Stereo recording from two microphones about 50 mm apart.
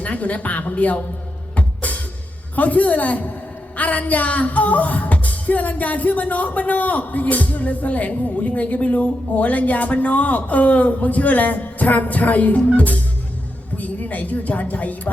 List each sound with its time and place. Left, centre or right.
0.0 s music: left
13.7 s a woman's voice: left